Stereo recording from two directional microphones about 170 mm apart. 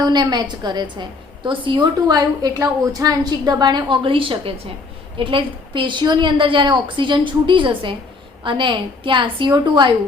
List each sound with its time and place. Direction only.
0.0 s a woman's voice: 25° right (ahead or behind)